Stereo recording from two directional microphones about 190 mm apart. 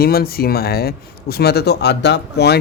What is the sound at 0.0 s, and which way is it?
Speech, 55° left (ahead or behind).